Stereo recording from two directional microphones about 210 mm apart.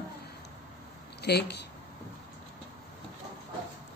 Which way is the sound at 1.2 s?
50° left (ahead or behind).